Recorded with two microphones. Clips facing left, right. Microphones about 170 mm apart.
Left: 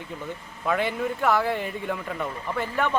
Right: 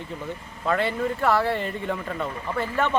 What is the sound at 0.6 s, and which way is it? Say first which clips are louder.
Speech: right 1 dB; 5° left (ahead or behind).